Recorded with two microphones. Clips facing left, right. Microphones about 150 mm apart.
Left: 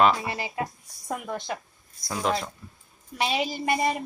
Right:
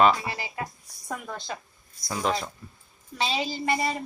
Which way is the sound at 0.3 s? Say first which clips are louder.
Left 3 dB; 20° left (ahead or behind).